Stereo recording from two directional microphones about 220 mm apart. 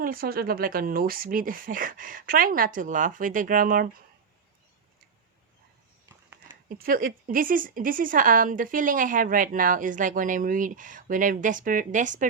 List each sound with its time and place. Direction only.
0.0 s a woman's voice: 40° right (ahead or behind)
6.7 s a woman's voice: 40° right (ahead or behind)